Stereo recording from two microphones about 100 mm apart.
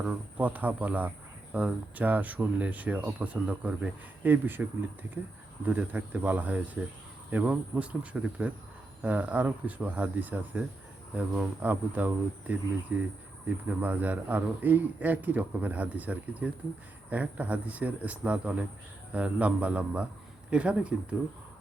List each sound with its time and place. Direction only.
0.0 s speech: 15° right (ahead or behind)
5.6 s speech: 20° right (ahead or behind)